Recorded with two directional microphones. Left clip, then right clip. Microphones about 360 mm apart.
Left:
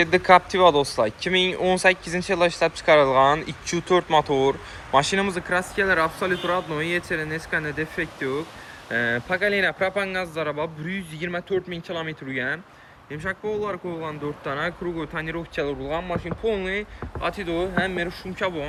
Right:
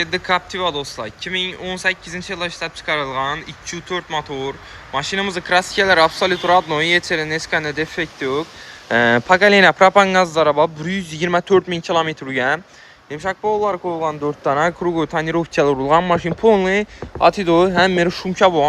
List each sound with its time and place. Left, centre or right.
0.0 s a man's voice: centre